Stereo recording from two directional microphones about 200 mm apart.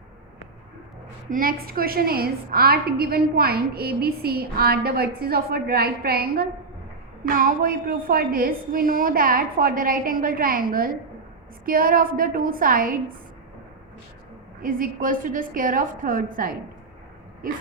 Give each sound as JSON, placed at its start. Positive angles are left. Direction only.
{"t": 1.3, "sound": "a woman's voice", "side_deg": -45}
{"t": 14.6, "sound": "a woman's voice", "side_deg": -45}